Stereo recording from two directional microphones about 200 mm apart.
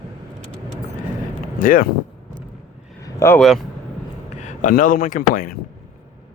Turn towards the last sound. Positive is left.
turn(degrees=45)  # may be behind; listen again after turning